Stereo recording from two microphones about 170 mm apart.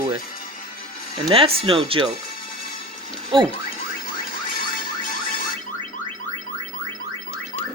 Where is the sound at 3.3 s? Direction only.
30° right (ahead or behind).